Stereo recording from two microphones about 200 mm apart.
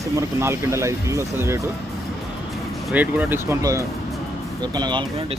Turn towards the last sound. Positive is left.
turn(degrees=-25)  # may be behind; listen again after turning